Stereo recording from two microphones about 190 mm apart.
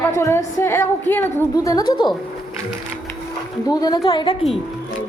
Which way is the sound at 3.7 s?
20° left (ahead or behind).